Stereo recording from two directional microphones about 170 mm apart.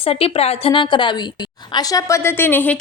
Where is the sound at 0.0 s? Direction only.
35° left (ahead or behind).